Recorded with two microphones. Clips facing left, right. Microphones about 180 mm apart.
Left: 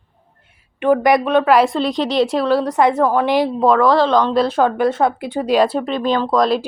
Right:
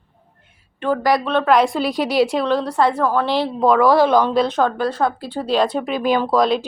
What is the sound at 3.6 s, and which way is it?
A woman's voice, 5° right (ahead or behind).